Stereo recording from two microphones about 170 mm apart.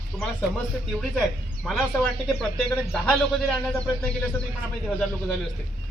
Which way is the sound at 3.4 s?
Centre (ahead or behind).